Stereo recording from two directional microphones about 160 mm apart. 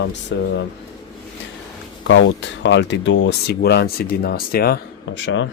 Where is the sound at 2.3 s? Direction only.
90° left; by 4.7 s 70° left (ahead or behind).